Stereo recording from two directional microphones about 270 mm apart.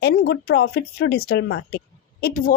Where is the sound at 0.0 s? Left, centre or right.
Left.